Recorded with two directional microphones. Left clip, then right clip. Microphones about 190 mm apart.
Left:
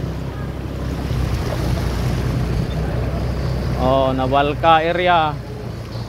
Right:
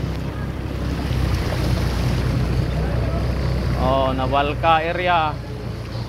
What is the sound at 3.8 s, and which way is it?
Speech, 80° left.